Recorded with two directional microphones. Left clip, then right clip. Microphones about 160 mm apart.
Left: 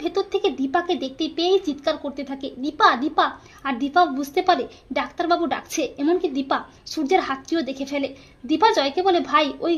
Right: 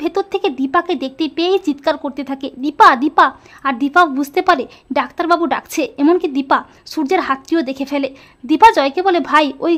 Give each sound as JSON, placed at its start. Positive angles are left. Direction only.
{"t": 0.0, "sound": "speech", "side_deg": -45}